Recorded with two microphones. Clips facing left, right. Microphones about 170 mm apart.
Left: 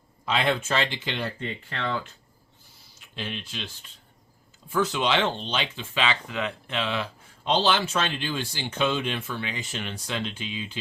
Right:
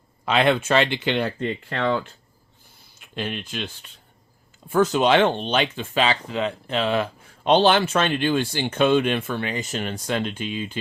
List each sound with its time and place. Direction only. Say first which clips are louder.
0.3 s speech: right 6 dB; 65° right (ahead or behind)
1.4 s speech: right 7 dB; 55° right (ahead or behind)
3.0 s speech: right 6 dB; 55° right (ahead or behind)
4.7 s speech: right 7 dB; 45° right (ahead or behind)